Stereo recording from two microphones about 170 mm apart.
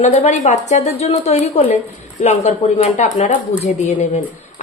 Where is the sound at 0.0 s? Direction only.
40° left (ahead or behind).